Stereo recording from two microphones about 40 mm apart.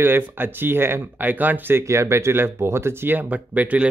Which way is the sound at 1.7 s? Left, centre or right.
Right.